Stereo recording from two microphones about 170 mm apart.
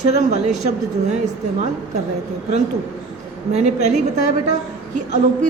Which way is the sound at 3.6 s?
40° right (ahead or behind).